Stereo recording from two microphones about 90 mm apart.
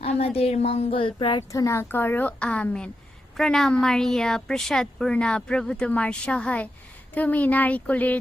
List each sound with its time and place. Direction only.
0.0 s speech: 90° left; by 1.5 s 75° left (ahead or behind)
1.5 s a woman's voice: 35° left (ahead or behind); by 8.2 s 15° left (ahead or behind)